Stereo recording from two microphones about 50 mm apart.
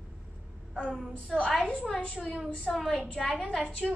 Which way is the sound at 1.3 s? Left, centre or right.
Centre.